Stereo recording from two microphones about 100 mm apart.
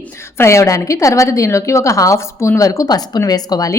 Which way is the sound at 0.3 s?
25° left (ahead or behind).